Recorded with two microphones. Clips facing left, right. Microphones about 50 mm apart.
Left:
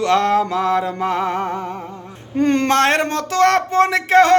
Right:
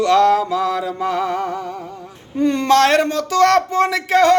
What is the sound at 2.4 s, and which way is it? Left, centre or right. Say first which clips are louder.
Speech: even; left.